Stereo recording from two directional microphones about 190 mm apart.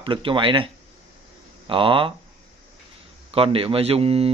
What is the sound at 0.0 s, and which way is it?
Speech, 25° right (ahead or behind).